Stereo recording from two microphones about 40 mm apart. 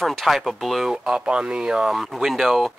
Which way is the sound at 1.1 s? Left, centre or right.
Right.